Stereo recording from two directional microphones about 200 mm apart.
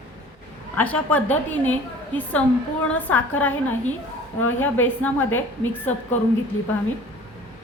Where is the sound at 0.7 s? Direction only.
10° left (ahead or behind).